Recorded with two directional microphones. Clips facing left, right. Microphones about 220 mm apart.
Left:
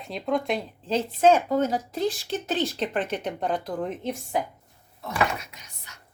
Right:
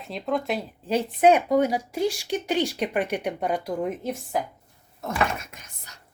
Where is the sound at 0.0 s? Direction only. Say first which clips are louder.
Left 1 dB; centre (ahead or behind).